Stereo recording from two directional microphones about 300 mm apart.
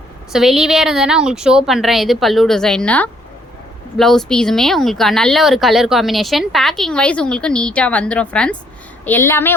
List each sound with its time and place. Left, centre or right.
0.3 s speech: centre